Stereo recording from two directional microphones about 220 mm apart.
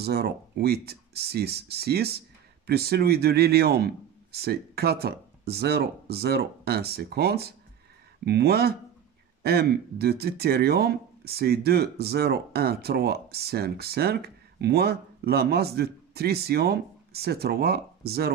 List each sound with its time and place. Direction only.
0.0 s speech: 45° right (ahead or behind)